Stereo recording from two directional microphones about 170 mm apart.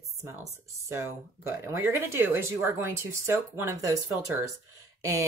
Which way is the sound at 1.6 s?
15° right (ahead or behind).